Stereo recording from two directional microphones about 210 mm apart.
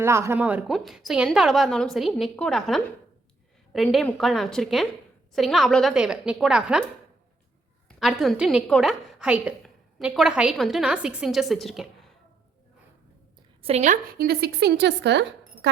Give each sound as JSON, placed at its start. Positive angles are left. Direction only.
{"t": 0.0, "sound": "a woman's voice", "side_deg": -10}
{"t": 7.9, "sound": "a woman's voice", "side_deg": 0}
{"t": 13.6, "sound": "a woman's voice", "side_deg": -30}